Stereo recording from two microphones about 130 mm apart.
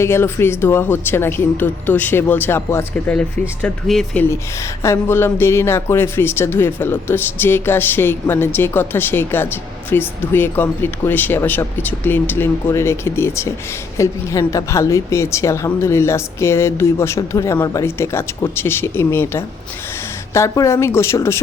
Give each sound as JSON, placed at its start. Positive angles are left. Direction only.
{"t": 0.0, "sound": "speech", "side_deg": 20}
{"t": 4.8, "sound": "a woman's voice", "side_deg": 20}